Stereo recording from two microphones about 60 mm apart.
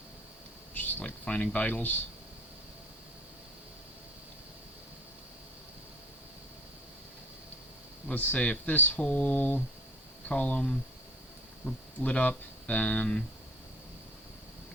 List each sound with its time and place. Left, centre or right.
0.7 s speech: left
8.1 s speech: left